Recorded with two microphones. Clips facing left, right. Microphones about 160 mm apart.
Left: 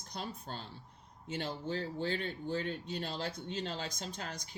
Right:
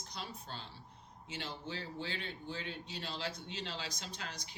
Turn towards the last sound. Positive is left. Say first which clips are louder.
# left 4 dB
turn(degrees=45)  # may be behind; listen again after turning